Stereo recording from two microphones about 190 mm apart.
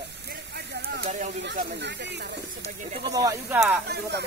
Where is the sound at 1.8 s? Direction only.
65° right (ahead or behind).